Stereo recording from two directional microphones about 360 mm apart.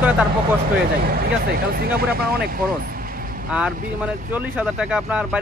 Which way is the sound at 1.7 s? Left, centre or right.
Right.